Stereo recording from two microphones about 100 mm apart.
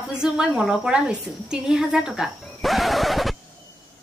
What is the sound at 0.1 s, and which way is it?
A woman's voice, 5° right (ahead or behind).